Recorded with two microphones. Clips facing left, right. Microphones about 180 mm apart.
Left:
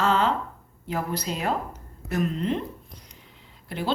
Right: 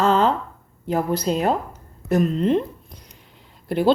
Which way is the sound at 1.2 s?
40° right (ahead or behind).